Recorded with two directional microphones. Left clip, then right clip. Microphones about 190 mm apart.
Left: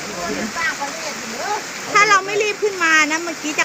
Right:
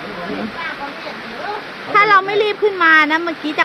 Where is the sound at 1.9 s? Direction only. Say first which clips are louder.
Right 2 dB; 15° right (ahead or behind).